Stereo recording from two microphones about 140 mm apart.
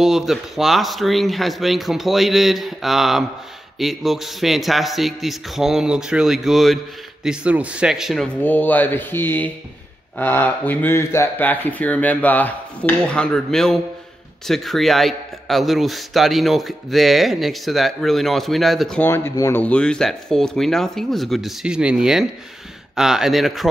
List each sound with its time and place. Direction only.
0.0 s a man's voice: centre (ahead or behind)
8.4 s a man's voice: 15° left (ahead or behind)
18.9 s speech: 15° left (ahead or behind)
19.6 s a man's voice: 10° left (ahead or behind)